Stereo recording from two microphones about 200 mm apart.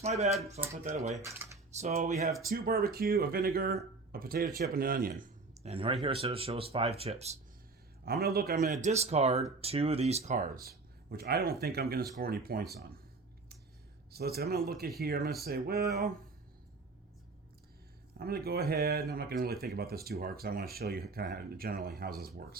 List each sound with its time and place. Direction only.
0.0 s speech: 35° right (ahead or behind)
8.0 s speech: 50° right (ahead or behind)
14.1 s speech: 50° right (ahead or behind)
18.2 s speech: 50° right (ahead or behind)